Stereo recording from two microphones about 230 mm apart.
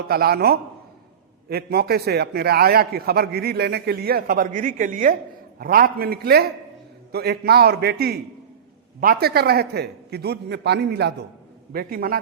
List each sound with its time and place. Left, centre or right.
0.1 s a man's voice: right